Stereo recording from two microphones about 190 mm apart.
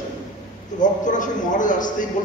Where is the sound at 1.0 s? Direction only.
40° left (ahead or behind).